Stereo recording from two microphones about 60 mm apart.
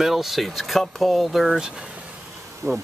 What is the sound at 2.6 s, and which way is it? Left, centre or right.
Bee, right.